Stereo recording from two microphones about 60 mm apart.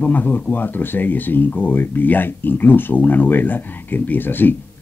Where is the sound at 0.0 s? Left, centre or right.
Left.